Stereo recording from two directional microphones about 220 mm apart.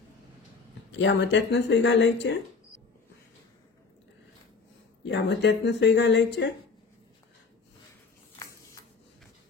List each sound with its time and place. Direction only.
0.9 s speech: 55° left (ahead or behind)
5.0 s speech: 55° left (ahead or behind)